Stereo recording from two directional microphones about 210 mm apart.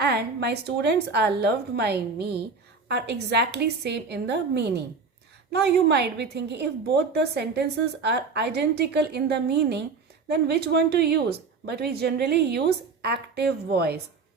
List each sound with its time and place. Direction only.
0.0 s a woman's voice: 50° right (ahead or behind)